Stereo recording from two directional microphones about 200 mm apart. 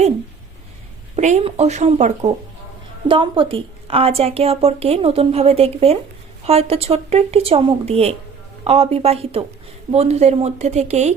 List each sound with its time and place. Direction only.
1.1 s speech: 35° right (ahead or behind)
3.1 s a woman's voice: 25° right (ahead or behind)